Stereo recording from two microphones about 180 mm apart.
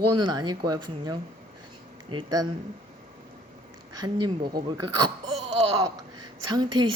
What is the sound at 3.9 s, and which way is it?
A woman's voice, 25° right (ahead or behind).